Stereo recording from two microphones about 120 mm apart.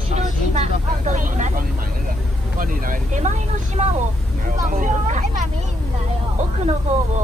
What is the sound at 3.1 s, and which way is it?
Speech, 85° right.